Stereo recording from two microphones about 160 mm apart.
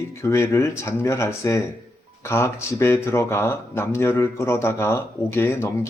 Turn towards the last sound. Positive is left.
turn(degrees=15)  # may be behind; listen again after turning